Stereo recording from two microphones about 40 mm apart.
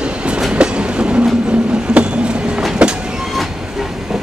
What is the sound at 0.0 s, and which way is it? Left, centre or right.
Train, right.